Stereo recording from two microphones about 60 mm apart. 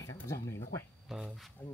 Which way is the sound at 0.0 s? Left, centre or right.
Left.